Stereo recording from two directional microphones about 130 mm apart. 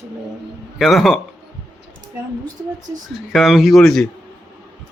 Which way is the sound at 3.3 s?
Centre (ahead or behind).